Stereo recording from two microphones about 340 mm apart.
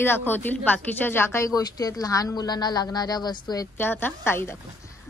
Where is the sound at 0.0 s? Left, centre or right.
Centre.